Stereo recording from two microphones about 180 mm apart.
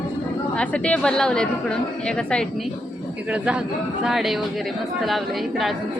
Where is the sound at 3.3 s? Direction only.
5° right (ahead or behind).